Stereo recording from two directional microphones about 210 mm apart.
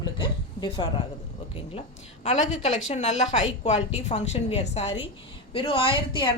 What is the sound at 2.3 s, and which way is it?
A woman's voice, 35° left (ahead or behind).